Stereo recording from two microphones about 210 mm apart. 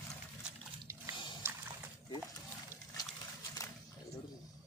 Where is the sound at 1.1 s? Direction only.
25° left (ahead or behind).